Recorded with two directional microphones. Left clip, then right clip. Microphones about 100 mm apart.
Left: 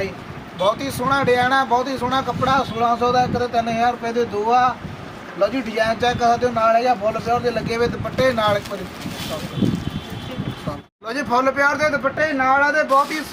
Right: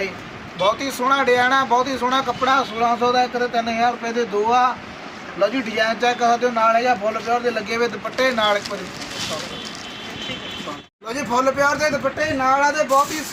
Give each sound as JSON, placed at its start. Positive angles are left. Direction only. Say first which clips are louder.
{"t": 0.6, "sound": "speech", "louder": "right 1 dB", "side_deg": 25}
{"t": 11.1, "sound": "a man's voice", "louder": "left 1 dB", "side_deg": -5}